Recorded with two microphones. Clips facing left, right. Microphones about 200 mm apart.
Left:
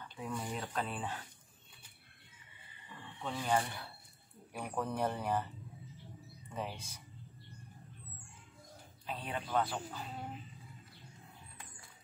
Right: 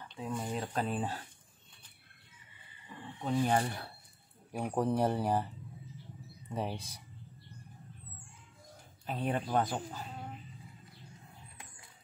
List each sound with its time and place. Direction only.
0.2 s a sound: 20° right (ahead or behind)
0.7 s speech: 40° right (ahead or behind)
3.2 s speech: 40° right (ahead or behind)
6.5 s speech: 35° right (ahead or behind)
9.0 s speech: 50° right (ahead or behind)